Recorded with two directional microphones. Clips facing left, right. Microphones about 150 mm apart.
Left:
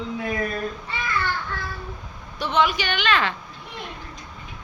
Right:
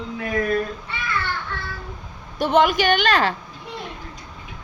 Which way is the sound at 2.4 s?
50° right (ahead or behind).